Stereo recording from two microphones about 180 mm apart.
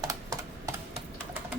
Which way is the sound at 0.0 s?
20° right (ahead or behind).